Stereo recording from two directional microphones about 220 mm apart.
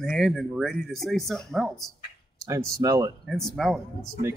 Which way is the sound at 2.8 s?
15° right (ahead or behind).